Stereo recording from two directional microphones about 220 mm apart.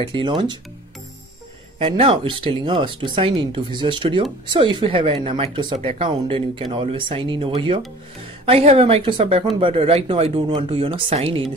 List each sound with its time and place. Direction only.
0.0 s speech: 20° right (ahead or behind)
1.8 s speech: 25° right (ahead or behind)